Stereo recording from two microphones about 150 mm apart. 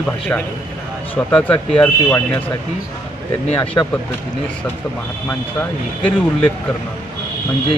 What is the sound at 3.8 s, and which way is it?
Speech, 25° left (ahead or behind).